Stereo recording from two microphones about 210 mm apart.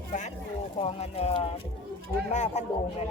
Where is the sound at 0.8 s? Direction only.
30° left (ahead or behind).